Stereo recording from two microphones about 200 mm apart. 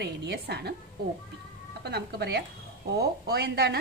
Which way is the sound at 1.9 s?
55° right (ahead or behind).